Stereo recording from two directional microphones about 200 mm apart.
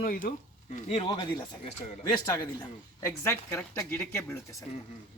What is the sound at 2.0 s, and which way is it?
Speech, 15° left (ahead or behind).